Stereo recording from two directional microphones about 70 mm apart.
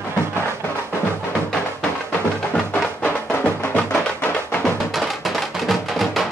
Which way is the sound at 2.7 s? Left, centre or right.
Left.